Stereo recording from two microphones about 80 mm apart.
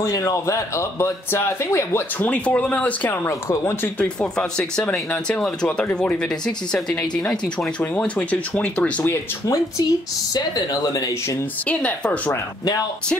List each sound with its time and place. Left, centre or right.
0.0 s speech: left; by 3.2 s centre
3.3 s speech: left
4.2 s speech: centre
9.0 s speech: left
10.3 s speech: left
11.6 s speech: centre